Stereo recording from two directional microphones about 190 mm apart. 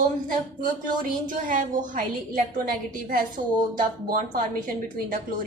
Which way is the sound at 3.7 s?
45° right (ahead or behind).